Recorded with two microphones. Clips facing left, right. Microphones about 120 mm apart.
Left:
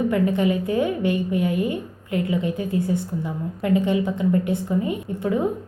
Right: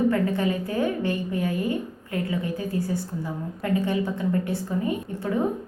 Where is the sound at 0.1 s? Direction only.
20° left (ahead or behind).